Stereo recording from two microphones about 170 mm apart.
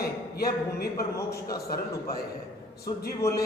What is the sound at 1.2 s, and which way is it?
Speech, 15° left (ahead or behind).